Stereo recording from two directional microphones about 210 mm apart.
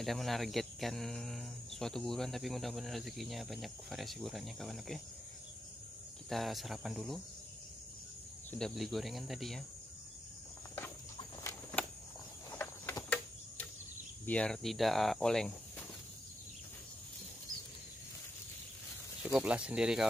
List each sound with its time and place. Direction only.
0.0 s speech: centre (ahead or behind)
6.2 s speech: centre (ahead or behind)
8.5 s speech: 5° left (ahead or behind)
12.4 s cricket: 10° left (ahead or behind)
14.2 s speech: 5° left (ahead or behind)
19.2 s speech: 5° right (ahead or behind)